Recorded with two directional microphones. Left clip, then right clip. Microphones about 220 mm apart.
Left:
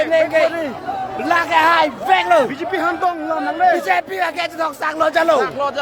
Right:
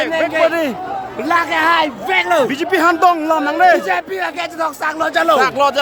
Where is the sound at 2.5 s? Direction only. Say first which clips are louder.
Right 6 dB; 50° right (ahead or behind).